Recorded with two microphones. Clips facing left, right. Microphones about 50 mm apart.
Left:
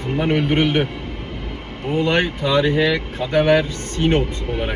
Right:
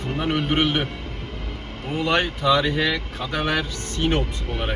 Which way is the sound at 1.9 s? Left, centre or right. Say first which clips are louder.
Left 3 dB; left.